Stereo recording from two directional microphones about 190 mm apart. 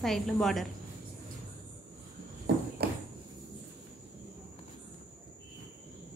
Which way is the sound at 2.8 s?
55° right (ahead or behind).